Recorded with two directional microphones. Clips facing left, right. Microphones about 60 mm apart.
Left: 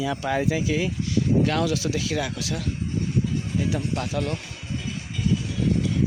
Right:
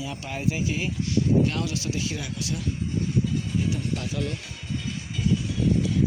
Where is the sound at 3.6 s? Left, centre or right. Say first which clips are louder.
Left 4 dB; left.